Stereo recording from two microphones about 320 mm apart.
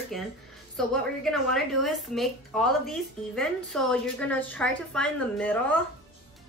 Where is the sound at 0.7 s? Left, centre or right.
Centre.